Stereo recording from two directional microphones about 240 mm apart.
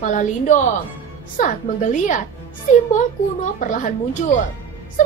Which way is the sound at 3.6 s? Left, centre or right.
Left.